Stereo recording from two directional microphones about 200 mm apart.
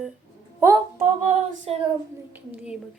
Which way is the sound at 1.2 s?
35° right (ahead or behind).